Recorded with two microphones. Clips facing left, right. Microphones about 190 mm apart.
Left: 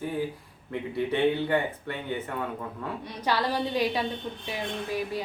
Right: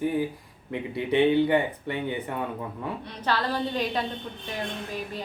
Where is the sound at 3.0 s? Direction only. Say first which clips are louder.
Left 1 dB; 10° left (ahead or behind).